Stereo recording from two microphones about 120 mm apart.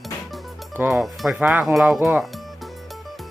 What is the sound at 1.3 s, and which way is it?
Speech, 15° right (ahead or behind).